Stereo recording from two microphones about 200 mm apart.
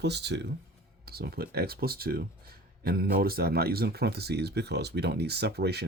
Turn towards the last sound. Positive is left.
turn(degrees=-55)  # may be behind; listen again after turning